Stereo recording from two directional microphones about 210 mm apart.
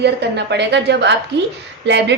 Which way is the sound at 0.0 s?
55° right (ahead or behind).